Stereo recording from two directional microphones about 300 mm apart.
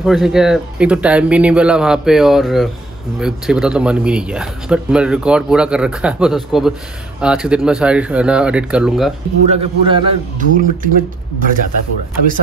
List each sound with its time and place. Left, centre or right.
0.0 s speech: centre
9.5 s a man's voice: centre